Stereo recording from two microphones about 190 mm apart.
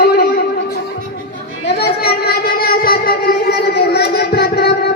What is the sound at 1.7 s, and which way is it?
Child singing, 55° left (ahead or behind).